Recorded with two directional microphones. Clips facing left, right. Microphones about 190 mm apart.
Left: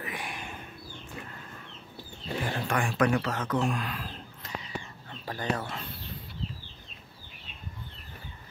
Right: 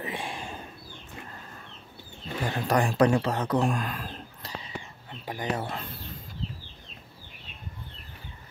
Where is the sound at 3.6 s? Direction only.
45° right (ahead or behind).